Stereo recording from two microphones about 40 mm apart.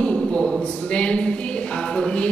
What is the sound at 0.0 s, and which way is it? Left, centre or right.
Speech, left.